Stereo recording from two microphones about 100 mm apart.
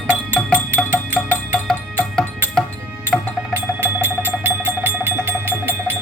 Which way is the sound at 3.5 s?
20° right (ahead or behind).